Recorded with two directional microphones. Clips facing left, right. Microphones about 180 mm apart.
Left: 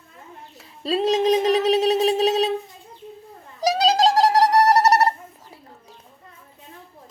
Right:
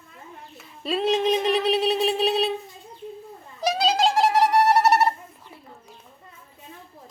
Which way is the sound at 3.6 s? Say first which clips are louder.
Left 3 dB; 40° left (ahead or behind).